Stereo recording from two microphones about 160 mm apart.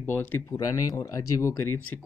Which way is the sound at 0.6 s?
25° left (ahead or behind).